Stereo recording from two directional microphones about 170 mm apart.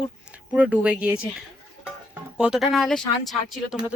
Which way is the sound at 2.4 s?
5° right (ahead or behind).